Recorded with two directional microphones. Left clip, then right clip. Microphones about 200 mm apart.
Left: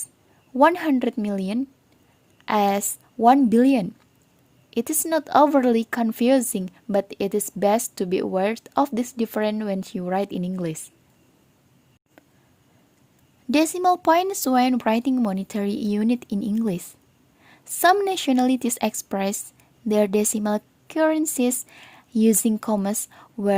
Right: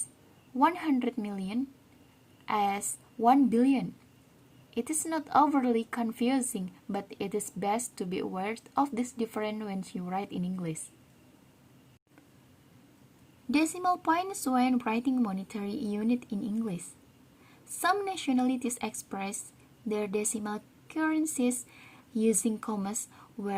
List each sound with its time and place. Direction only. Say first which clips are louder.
0.6 s a woman's voice: left 9 dB; 45° left (ahead or behind)
13.5 s a woman's voice: left 9 dB; 45° left (ahead or behind)